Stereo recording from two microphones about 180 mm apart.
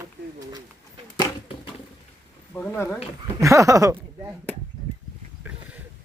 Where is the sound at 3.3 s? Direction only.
15° right (ahead or behind).